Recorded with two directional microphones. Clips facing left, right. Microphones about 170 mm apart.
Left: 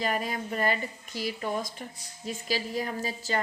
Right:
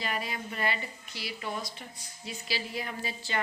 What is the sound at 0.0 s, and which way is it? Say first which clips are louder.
Speech: left 5 dB; 45° left (ahead or behind).